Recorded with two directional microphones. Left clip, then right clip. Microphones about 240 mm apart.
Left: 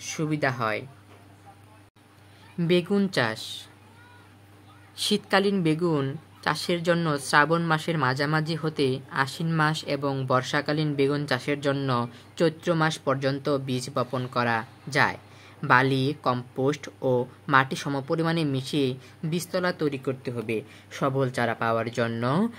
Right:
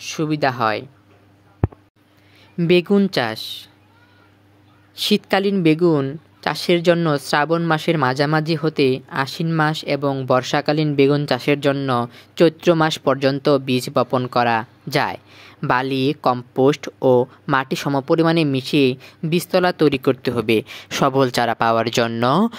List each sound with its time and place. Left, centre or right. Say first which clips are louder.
0.0 s speech: right 7 dB; right
2.5 s speech: right 8 dB; right
4.9 s speech: right 5 dB; right